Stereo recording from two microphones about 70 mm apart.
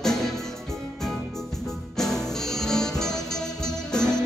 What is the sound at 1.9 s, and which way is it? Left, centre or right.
Music, centre.